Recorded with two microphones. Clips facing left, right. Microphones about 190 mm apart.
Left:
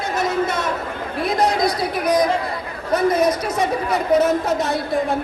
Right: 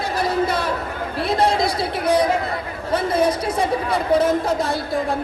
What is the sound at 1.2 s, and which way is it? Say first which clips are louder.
Chatter: even; 30° right (ahead or behind).